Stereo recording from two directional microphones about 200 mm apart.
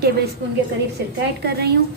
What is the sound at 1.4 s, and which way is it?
Speech, 55° right (ahead or behind).